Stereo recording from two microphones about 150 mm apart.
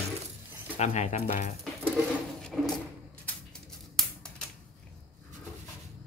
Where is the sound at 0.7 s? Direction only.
45° left (ahead or behind).